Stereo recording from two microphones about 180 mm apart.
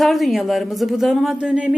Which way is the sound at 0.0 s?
Centre (ahead or behind).